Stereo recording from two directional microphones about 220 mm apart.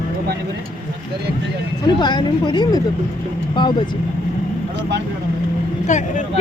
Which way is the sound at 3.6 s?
20° left (ahead or behind).